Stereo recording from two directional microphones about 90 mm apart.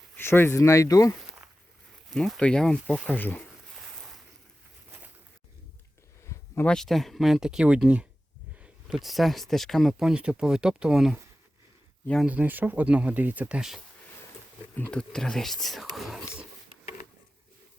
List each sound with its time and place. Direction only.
0.2 s speech: 25° left (ahead or behind)
2.0 s speech: centre (ahead or behind)
3.1 s speech: 20° left (ahead or behind)
6.2 s a sound: 30° left (ahead or behind)
6.7 s speech: 5° left (ahead or behind); by 8.0 s 10° right (ahead or behind)
8.5 s a sound: 15° right (ahead or behind)
9.0 s speech: centre (ahead or behind)
12.2 s speech: 15° right (ahead or behind)
13.6 s speech: 5° right (ahead or behind)
14.8 s speech: 10° left (ahead or behind)